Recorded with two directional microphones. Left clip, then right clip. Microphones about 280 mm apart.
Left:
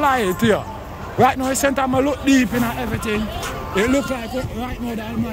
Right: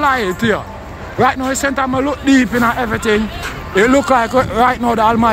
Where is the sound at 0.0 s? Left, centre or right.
Centre.